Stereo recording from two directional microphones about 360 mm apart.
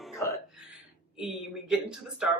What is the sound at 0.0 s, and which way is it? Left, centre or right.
Music, centre.